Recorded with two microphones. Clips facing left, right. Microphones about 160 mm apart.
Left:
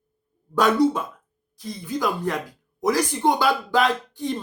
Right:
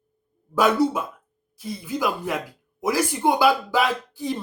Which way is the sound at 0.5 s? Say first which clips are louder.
Left 1 dB; 5° right (ahead or behind).